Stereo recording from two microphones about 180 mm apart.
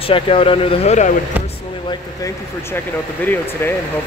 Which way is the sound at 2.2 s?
15° left (ahead or behind).